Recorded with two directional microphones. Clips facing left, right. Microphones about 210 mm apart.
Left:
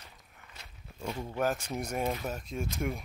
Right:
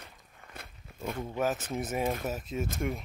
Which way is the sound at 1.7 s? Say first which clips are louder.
Right 2 dB; 5° right (ahead or behind).